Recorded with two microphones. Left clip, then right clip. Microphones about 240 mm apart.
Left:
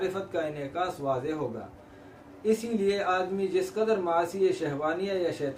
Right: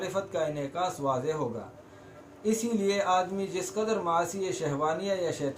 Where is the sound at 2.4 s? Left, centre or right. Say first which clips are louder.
Left 2 dB; centre.